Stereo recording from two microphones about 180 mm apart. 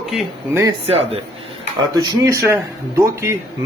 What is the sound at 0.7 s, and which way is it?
Speech, 35° right (ahead or behind).